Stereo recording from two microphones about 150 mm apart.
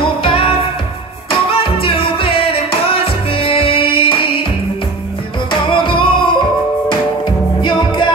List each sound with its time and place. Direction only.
0.0 s music: 35° left (ahead or behind)
5.5 s music: 35° left (ahead or behind)